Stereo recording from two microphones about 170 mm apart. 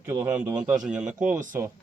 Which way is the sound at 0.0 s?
10° right (ahead or behind).